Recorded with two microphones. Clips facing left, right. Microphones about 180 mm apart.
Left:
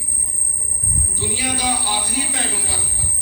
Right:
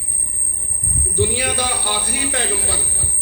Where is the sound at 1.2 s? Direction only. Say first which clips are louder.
Right 5 dB; 60° right (ahead or behind).